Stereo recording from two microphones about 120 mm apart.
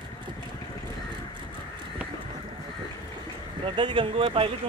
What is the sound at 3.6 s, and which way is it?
Speech, 40° right (ahead or behind).